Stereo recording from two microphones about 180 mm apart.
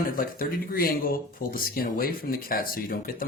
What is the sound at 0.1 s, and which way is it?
Speech, 55° left (ahead or behind).